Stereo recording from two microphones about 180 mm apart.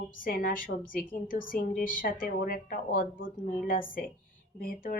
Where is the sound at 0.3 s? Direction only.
50° left (ahead or behind).